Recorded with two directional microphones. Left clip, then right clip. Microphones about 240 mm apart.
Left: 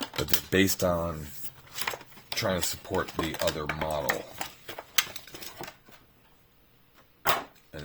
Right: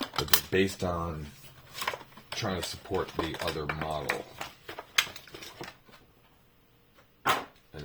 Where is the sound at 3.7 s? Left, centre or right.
Left.